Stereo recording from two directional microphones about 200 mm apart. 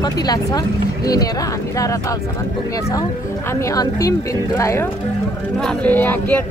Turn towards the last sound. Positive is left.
turn(degrees=10)  # may be behind; listen again after turning